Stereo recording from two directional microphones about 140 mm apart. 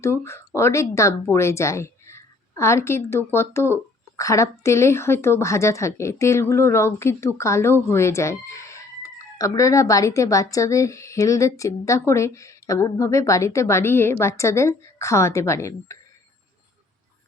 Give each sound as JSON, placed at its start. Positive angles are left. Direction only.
{"t": 0.0, "sound": "a woman's voice", "side_deg": 20}